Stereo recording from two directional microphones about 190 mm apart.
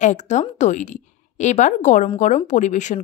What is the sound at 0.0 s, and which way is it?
Speech, 40° left (ahead or behind).